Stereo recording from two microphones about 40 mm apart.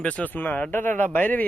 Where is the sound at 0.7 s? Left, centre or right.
Left.